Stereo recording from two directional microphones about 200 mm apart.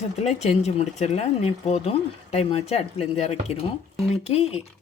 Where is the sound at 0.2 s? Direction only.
35° left (ahead or behind).